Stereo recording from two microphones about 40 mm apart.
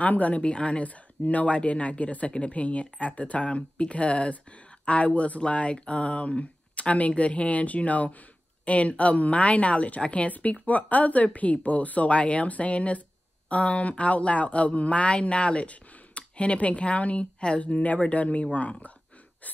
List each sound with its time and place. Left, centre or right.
0.0 s speech: left